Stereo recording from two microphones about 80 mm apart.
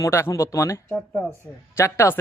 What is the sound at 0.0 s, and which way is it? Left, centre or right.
A man's voice, left.